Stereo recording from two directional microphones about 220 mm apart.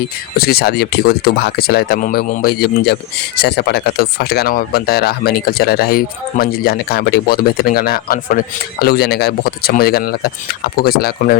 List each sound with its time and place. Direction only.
0.3 s speech: 45° left (ahead or behind)